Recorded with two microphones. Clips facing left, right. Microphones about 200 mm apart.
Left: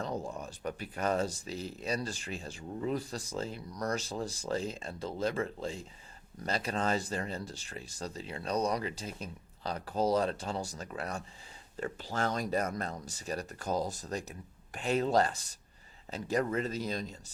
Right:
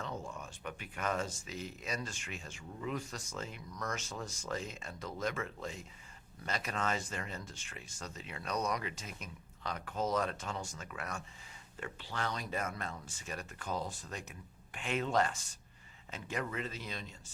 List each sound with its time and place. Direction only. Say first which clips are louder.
0.0 s speech: left 6 dB; 35° left (ahead or behind)